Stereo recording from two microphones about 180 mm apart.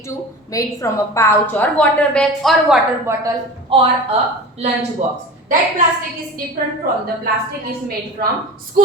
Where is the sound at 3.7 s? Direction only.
30° right (ahead or behind).